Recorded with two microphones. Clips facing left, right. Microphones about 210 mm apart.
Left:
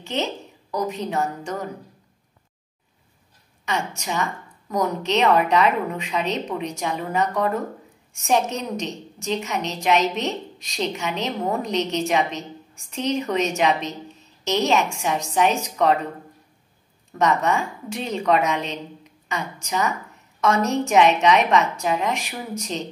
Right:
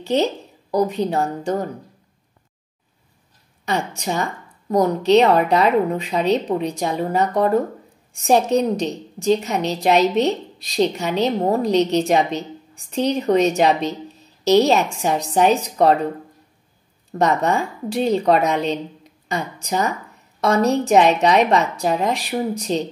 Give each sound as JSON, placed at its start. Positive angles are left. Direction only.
{"t": 0.0, "sound": "a woman's voice", "side_deg": -35}
{"t": 3.6, "sound": "a woman's voice", "side_deg": -35}
{"t": 17.2, "sound": "a woman's voice", "side_deg": -35}